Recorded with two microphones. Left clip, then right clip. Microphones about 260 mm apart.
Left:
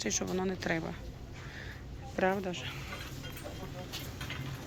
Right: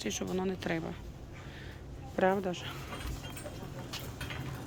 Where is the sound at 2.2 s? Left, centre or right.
Centre.